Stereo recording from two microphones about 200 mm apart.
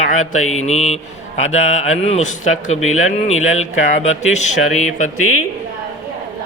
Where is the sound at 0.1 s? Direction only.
40° left (ahead or behind).